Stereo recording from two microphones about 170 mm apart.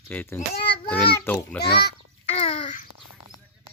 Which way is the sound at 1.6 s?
75° left (ahead or behind).